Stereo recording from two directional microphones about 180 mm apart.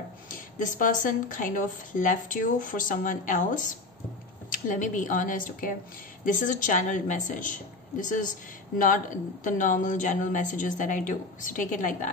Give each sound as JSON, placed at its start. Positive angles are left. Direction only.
{"t": 0.3, "sound": "speech", "side_deg": 45}